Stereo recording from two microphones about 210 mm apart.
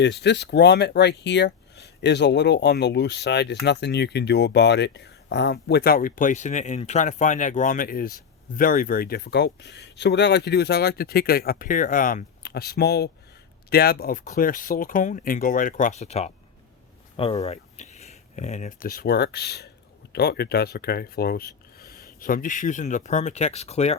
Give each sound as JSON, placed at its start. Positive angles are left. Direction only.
{"t": 0.0, "sound": "speech", "side_deg": 55}